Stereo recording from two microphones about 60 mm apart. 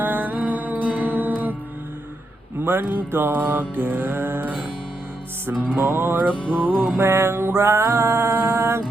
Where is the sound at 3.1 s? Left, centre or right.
Right.